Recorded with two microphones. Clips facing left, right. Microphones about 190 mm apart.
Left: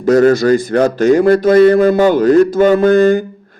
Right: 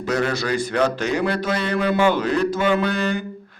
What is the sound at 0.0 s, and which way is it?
A man's voice, 45° left (ahead or behind).